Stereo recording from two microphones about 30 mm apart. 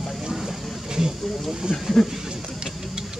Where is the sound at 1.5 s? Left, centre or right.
Centre.